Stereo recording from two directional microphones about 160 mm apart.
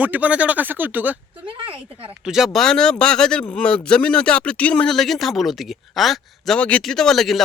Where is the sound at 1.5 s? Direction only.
35° right (ahead or behind).